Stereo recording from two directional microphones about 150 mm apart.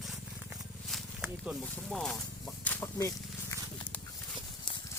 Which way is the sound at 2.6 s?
10° left (ahead or behind).